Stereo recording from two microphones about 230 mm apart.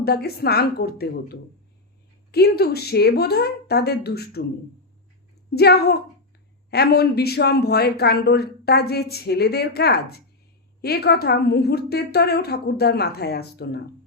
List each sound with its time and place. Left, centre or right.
0.0 s speech: left
5.5 s speech: left